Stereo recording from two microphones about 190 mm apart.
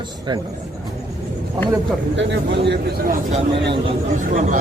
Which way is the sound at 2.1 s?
70° right (ahead or behind).